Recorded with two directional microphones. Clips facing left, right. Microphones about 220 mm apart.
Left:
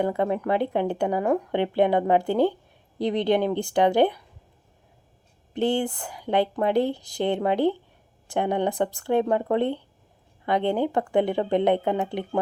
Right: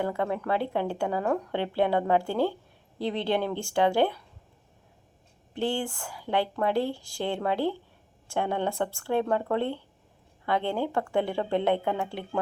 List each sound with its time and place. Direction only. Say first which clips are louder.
0.0 s speech: left 5 dB; 20° left (ahead or behind)
5.5 s speech: left 5 dB; 20° left (ahead or behind)